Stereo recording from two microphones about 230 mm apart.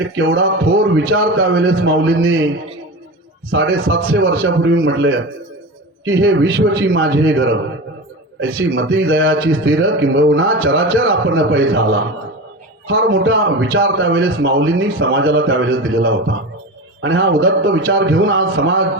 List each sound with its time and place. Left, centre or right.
0.2 s a man's voice: right
3.5 s a man's voice: right
12.9 s a man's voice: right